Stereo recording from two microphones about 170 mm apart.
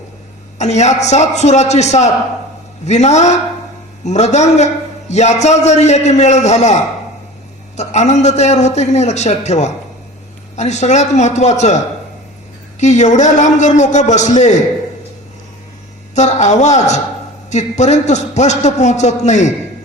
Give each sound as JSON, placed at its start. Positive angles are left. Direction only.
{"t": 0.6, "sound": "a man's voice", "side_deg": 40}
{"t": 12.8, "sound": "a man's voice", "side_deg": 45}
{"t": 16.1, "sound": "a man's voice", "side_deg": 40}